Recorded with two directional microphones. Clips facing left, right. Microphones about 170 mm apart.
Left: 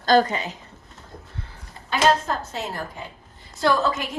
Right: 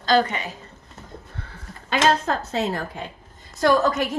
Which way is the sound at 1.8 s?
75° right (ahead or behind).